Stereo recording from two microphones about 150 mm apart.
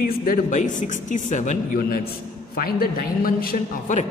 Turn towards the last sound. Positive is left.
turn(degrees=55)  # may be behind; listen again after turning